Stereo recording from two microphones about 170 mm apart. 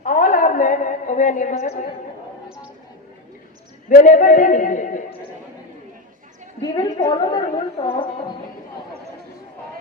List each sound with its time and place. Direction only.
0.0 s a sound: 50° left (ahead or behind)
3.8 s a man's voice: 50° left (ahead or behind)
6.6 s a woman's voice: 20° left (ahead or behind)